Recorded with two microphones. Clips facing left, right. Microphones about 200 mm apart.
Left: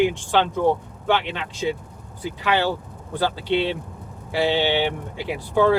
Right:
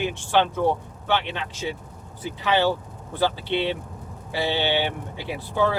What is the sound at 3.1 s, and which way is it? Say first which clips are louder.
Speech: left 2 dB; 15° left (ahead or behind).